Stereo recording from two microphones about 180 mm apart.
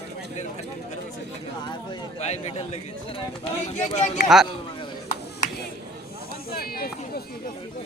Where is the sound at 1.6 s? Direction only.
25° left (ahead or behind).